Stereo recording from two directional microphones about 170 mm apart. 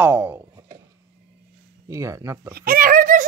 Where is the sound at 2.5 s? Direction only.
60° right (ahead or behind).